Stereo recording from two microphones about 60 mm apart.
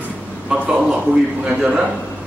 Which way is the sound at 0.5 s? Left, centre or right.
Centre.